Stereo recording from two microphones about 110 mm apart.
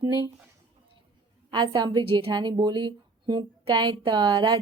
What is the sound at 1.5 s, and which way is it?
A woman's voice, 45° right (ahead or behind).